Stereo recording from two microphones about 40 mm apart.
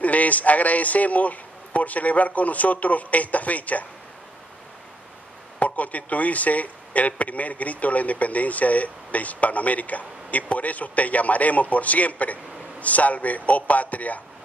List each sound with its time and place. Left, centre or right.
0.0 s a man's voice: left
5.6 s a man's voice: left